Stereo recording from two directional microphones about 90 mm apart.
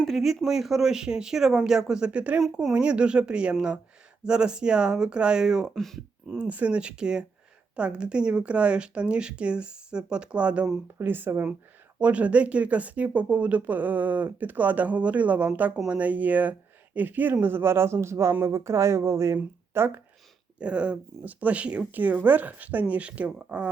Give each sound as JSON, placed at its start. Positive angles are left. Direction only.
{"t": 0.0, "sound": "speech", "side_deg": 0}
{"t": 2.4, "sound": "speech", "side_deg": -5}
{"t": 6.2, "sound": "speech", "side_deg": -10}
{"t": 20.6, "sound": "speech", "side_deg": -10}